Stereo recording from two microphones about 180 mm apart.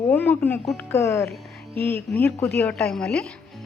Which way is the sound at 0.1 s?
10° left (ahead or behind).